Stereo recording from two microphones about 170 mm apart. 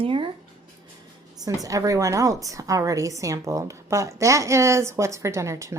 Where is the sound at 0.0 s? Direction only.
30° right (ahead or behind).